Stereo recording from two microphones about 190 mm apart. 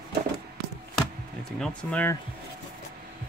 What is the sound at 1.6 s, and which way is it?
Speech, 5° left (ahead or behind).